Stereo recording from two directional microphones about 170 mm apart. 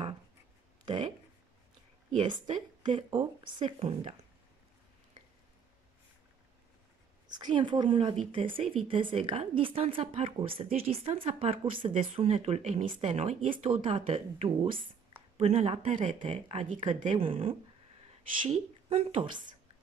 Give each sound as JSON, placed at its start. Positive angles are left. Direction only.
{"t": 2.2, "sound": "a woman's voice", "side_deg": -30}
{"t": 2.5, "sound": "a woman's voice", "side_deg": -45}
{"t": 3.1, "sound": "a woman's voice", "side_deg": -30}
{"t": 7.2, "sound": "a woman's voice", "side_deg": -25}